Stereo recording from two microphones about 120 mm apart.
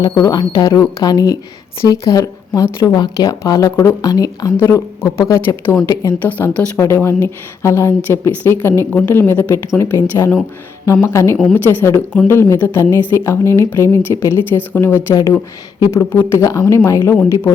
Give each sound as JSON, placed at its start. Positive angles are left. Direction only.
{"t": 0.2, "sound": "speech", "side_deg": 35}
{"t": 4.1, "sound": "speech", "side_deg": 30}
{"t": 6.2, "sound": "speech", "side_deg": 15}
{"t": 8.9, "sound": "speech", "side_deg": 10}
{"t": 9.1, "sound": "speech", "side_deg": 20}